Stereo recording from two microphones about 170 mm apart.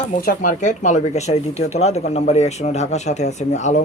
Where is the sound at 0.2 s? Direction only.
50° left (ahead or behind).